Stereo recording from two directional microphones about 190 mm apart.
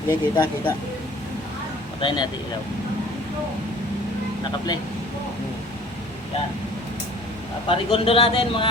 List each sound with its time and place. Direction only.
0.1 s a man's voice: 25° left (ahead or behind)
2.0 s a man's voice: 25° left (ahead or behind)
7.7 s a man's voice: 30° left (ahead or behind)